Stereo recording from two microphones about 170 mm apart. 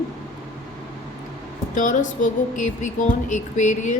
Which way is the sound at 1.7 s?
50° left (ahead or behind).